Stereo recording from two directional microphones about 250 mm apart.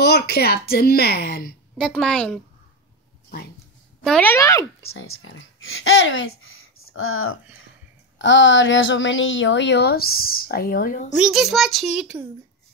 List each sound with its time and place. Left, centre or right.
0.0 s speech: left
1.8 s a child's voice: centre
4.0 s speech: centre
4.9 s a woman's voice: left
11.1 s a child's voice: centre